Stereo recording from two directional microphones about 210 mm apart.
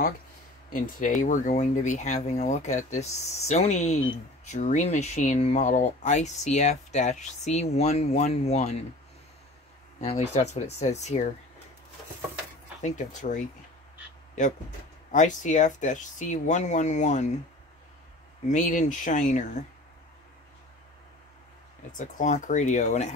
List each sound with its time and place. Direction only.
0.9 s speech: 35° left (ahead or behind)
9.9 s speech: 35° left (ahead or behind)
12.8 s speech: 35° left (ahead or behind)
15.0 s speech: 35° left (ahead or behind)
18.5 s speech: 35° left (ahead or behind)
21.9 s speech: 35° left (ahead or behind)